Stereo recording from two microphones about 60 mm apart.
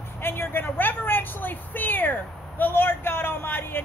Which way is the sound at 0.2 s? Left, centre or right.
Left.